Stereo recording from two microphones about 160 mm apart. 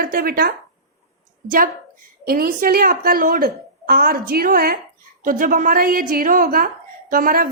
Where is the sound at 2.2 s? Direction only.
70° right (ahead or behind).